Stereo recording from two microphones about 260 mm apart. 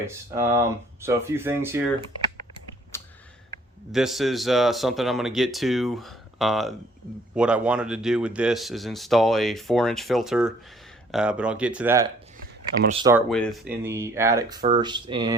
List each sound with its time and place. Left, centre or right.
0.0 s speech: centre
2.9 s a sound: centre
3.9 s speech: centre
12.9 s speech: centre
13.1 s speech: centre
13.8 s speech: centre